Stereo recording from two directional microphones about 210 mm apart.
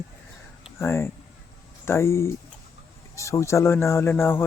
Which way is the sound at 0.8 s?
10° left (ahead or behind).